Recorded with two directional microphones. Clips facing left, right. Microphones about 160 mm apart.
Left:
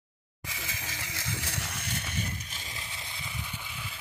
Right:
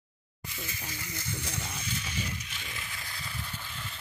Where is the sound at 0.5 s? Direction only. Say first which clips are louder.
Even; 90° left; by 2.3 s 55° left (ahead or behind).